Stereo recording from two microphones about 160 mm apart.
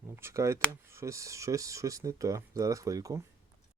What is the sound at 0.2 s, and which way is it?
Speech, 15° right (ahead or behind).